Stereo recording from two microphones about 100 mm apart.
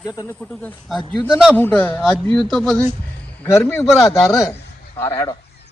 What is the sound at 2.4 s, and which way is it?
Speech, centre (ahead or behind).